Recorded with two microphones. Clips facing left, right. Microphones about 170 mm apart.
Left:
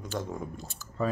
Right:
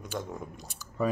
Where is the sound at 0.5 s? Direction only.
15° right (ahead or behind).